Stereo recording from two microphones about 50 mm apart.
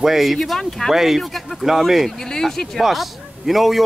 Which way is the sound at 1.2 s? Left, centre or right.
Centre.